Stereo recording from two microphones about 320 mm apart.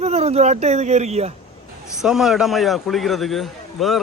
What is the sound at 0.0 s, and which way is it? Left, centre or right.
Speech, centre.